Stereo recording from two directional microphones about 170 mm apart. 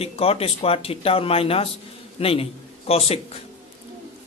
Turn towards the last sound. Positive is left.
turn(degrees=35)  # may be behind; listen again after turning